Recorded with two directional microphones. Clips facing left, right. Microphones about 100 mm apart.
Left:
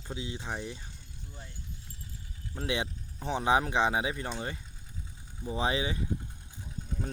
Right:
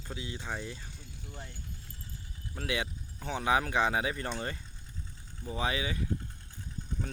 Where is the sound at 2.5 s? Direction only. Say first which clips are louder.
Left 2 dB; 25° left (ahead or behind); by 4.6 s 5° left (ahead or behind).